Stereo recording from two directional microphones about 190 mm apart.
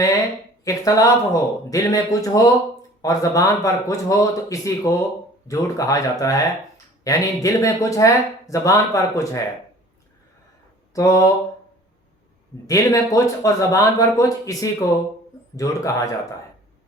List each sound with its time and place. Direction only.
0.6 s speech: 20° left (ahead or behind)
10.9 s speech: 15° left (ahead or behind)
12.6 s speech: 20° left (ahead or behind)